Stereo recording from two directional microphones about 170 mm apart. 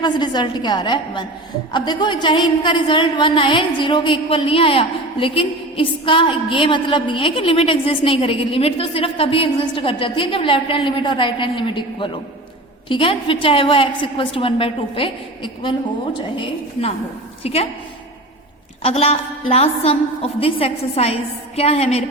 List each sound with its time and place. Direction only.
0.0 s a woman's voice: 25° left (ahead or behind)
17.4 s a woman's voice: 35° left (ahead or behind)
18.8 s a woman's voice: 35° left (ahead or behind)